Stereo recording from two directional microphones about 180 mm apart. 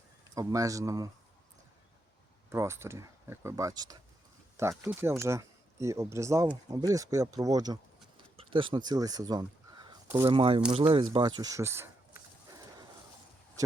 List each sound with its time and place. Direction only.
0.3 s speech: 20° right (ahead or behind)
2.5 s speech: 15° right (ahead or behind)
10.2 s speech: 30° right (ahead or behind)
10.7 s a sound: 35° right (ahead or behind); by 12.8 s 15° right (ahead or behind)